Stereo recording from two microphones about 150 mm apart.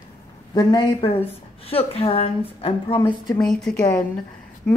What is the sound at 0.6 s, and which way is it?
Speech, 30° left (ahead or behind).